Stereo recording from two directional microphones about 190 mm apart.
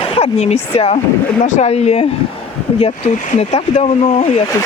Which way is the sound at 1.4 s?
35° left (ahead or behind).